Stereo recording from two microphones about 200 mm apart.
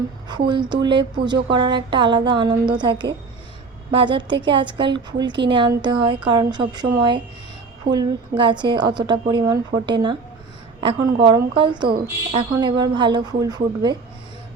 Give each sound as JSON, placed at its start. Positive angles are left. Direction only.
{"t": 0.3, "sound": "speech", "side_deg": -25}